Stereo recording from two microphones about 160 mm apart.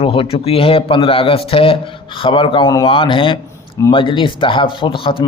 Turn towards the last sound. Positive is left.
turn(degrees=30)  # may be behind; listen again after turning